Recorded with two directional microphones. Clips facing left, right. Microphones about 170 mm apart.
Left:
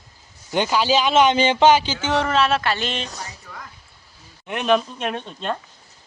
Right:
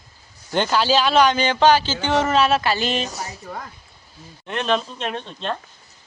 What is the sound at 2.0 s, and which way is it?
Speech, centre (ahead or behind).